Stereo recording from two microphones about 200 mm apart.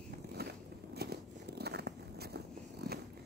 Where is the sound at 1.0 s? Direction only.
55° right (ahead or behind).